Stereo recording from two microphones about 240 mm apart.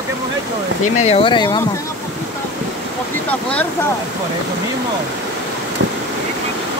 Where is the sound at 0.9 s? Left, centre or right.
Left.